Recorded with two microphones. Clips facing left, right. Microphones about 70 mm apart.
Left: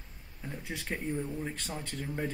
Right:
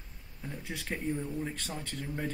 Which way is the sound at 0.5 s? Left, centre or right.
Left.